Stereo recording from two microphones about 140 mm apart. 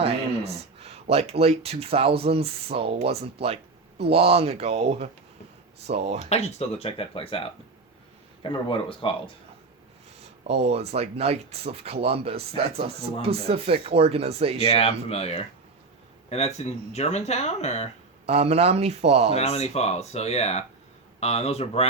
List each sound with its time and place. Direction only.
0.0 s speech: 45° right (ahead or behind)
6.2 s speech: 50° left (ahead or behind)
10.4 s speech: 45° right (ahead or behind)
14.6 s speech: 45° left (ahead or behind)
18.3 s speech: 50° right (ahead or behind)
19.4 s speech: 50° left (ahead or behind)